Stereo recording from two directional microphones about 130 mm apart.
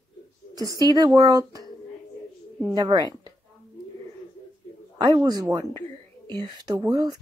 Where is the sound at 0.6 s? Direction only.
30° right (ahead or behind).